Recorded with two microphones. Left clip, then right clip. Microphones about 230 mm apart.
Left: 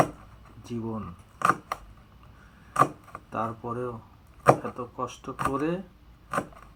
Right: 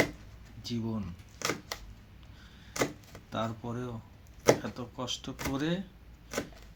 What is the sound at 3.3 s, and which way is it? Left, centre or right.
Speech, right.